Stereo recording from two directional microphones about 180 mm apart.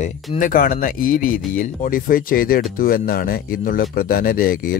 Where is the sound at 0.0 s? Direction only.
45° left (ahead or behind).